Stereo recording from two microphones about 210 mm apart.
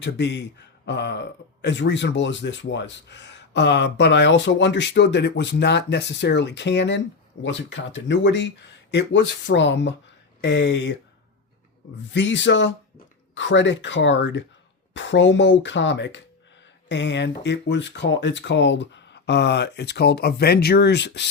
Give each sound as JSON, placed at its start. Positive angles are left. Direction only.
{"t": 0.0, "sound": "speech", "side_deg": 55}
{"t": 12.1, "sound": "speech", "side_deg": 60}